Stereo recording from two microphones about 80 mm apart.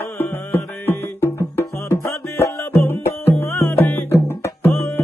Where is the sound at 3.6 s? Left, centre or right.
Left.